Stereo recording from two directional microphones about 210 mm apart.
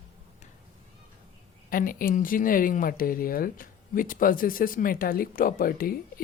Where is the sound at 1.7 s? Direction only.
40° left (ahead or behind).